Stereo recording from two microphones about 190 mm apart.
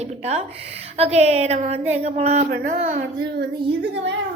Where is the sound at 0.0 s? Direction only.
35° right (ahead or behind).